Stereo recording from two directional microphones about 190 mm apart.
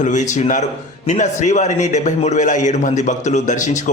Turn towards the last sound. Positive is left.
turn(degrees=40)  # may be behind; listen again after turning